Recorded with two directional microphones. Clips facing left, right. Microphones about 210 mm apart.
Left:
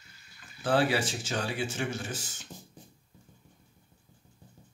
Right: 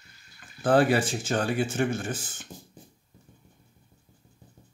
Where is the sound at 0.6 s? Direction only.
50° right (ahead or behind).